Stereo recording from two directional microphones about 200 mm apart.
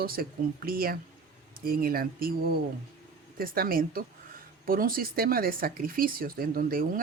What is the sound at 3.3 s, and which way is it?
Speech, 50° right (ahead or behind).